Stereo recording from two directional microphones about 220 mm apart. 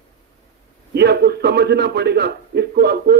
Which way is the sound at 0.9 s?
50° right (ahead or behind).